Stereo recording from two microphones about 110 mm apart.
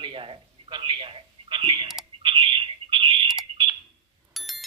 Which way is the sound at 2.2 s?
55° right (ahead or behind).